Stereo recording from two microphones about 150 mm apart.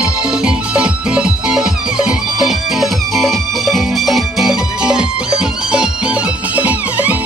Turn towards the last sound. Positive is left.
turn(degrees=-10)  # may be behind; listen again after turning